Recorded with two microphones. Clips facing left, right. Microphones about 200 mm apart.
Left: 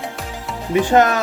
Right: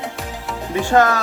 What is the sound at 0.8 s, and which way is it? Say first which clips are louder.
Speech: left 1 dB; 20° left (ahead or behind).